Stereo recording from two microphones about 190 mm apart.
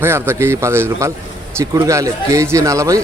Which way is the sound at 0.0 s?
10° right (ahead or behind).